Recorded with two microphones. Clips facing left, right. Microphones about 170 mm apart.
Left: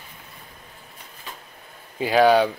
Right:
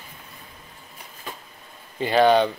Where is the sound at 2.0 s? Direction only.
5° left (ahead or behind).